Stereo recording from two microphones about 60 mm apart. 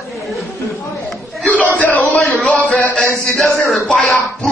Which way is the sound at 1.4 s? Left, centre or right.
Left.